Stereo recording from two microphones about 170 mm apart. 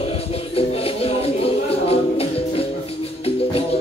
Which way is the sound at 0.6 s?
35° left (ahead or behind).